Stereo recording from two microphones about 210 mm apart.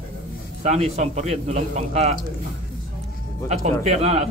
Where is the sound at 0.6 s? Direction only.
35° right (ahead or behind).